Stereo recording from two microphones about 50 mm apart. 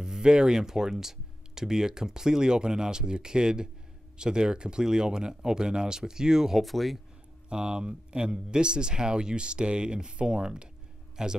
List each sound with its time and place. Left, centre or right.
0.0 s speech: centre
6.6 s speech: centre
7.4 s speech: centre